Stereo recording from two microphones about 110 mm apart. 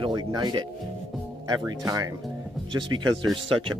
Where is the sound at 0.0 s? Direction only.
40° right (ahead or behind).